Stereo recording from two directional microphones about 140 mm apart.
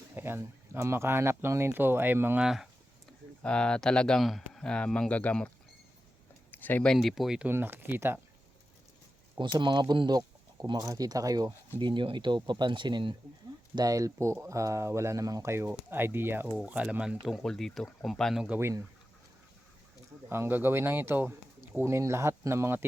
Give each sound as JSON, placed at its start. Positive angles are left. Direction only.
{"t": 0.1, "sound": "speech", "side_deg": -15}
{"t": 2.4, "sound": "speech", "side_deg": -5}
{"t": 6.5, "sound": "speech", "side_deg": 15}
{"t": 9.4, "sound": "speech", "side_deg": -35}
{"t": 20.3, "sound": "speech", "side_deg": -15}